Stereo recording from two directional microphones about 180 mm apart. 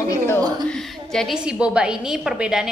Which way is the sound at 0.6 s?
5° left (ahead or behind).